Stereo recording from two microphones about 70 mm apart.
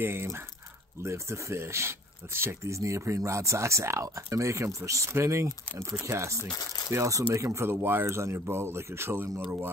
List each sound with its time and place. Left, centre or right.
0.0 s speech: right
6.5 s speech: left
6.9 s speech: right